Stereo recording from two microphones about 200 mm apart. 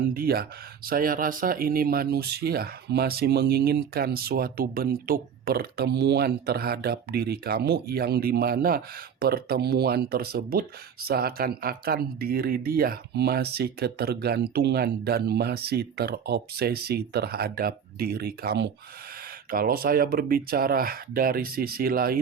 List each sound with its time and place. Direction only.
0.1 s speech: 50° right (ahead or behind)